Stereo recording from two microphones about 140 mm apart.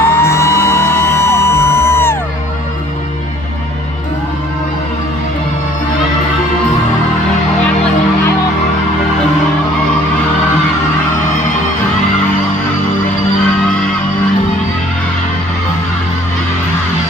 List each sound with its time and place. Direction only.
0.0 s vehicle: 20° left (ahead or behind)